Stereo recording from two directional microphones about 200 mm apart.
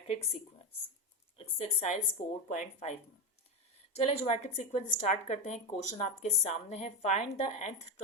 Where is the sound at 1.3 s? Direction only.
30° left (ahead or behind).